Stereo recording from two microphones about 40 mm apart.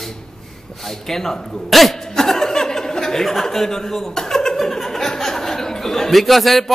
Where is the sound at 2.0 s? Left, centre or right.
Centre.